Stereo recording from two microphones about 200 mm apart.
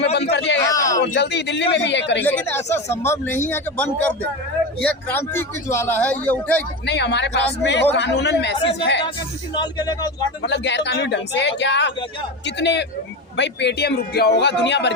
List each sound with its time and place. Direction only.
0.1 s a sound: 55° left (ahead or behind)
0.7 s a sound: 15° left (ahead or behind)
1.1 s speech: 60° left (ahead or behind)
2.2 s a man's voice: 10° left (ahead or behind)
6.8 s speech: 60° left (ahead or behind)
9.6 s speech: 20° left (ahead or behind)
10.4 s speech: 60° left (ahead or behind)